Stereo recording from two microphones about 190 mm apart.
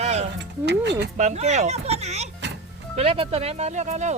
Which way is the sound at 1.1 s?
40° right (ahead or behind).